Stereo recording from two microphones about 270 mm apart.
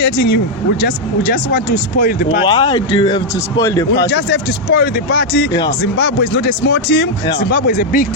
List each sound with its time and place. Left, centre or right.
0.8 s speech: left
2.4 s speech: centre
3.9 s speech: left